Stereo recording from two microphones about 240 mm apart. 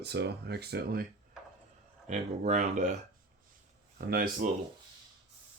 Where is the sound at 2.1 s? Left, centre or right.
Right.